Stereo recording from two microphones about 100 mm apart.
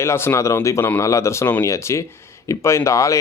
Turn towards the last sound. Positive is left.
turn(degrees=30)  # may be behind; listen again after turning